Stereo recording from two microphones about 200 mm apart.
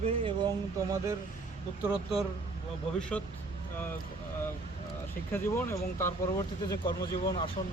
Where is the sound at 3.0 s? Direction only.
5° left (ahead or behind).